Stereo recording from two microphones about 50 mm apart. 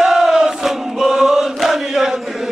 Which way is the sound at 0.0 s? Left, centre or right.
Centre.